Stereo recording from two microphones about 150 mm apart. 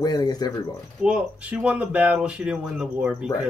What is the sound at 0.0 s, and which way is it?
Speech, 25° left (ahead or behind).